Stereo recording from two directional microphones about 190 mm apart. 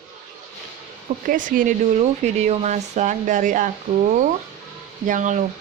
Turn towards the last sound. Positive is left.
turn(degrees=-40)  # may be behind; listen again after turning